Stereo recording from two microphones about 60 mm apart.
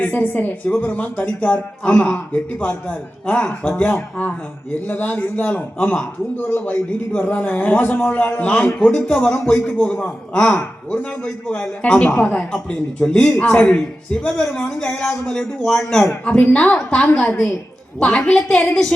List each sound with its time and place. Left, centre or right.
0.0 s a woman's voice: left
9.7 s a man's voice: centre
16.2 s a man's voice: centre